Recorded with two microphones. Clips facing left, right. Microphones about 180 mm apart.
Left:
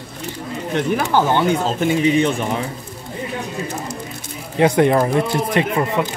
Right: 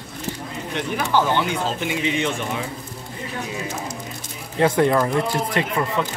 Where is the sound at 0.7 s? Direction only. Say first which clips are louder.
Left 4 dB; 45° left (ahead or behind).